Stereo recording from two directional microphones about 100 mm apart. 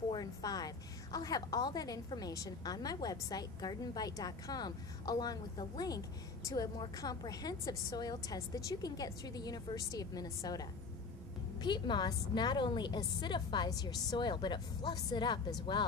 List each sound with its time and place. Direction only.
0.1 s a woman's voice: 40° left (ahead or behind)
11.6 s a woman's voice: 50° left (ahead or behind)